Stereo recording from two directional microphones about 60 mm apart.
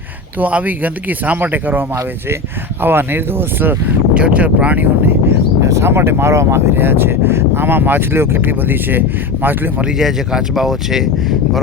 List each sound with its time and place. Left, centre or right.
0.3 s speech: right
2.8 s speech: right
4.1 s speech: right
5.6 s speech: right
10.0 s speech: centre